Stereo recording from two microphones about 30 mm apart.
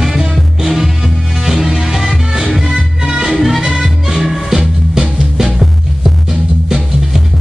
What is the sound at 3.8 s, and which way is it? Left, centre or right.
Music, centre.